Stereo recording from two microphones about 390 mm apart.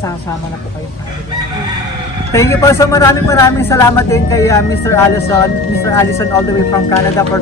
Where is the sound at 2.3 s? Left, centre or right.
Centre.